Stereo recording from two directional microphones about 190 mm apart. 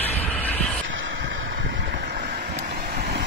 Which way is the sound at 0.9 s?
75° right (ahead or behind).